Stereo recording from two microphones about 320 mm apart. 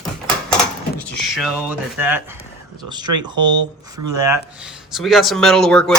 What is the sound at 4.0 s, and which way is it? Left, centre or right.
Speech, right.